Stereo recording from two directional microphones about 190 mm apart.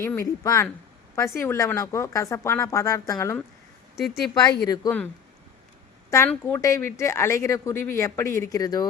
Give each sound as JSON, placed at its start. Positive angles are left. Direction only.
{"t": 0.0, "sound": "speech", "side_deg": 15}
{"t": 3.9, "sound": "speech", "side_deg": 0}
{"t": 4.6, "sound": "speech", "side_deg": 20}
{"t": 6.1, "sound": "speech", "side_deg": 15}